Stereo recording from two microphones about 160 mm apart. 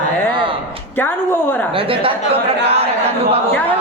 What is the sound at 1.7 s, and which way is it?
Speech, 35° right (ahead or behind).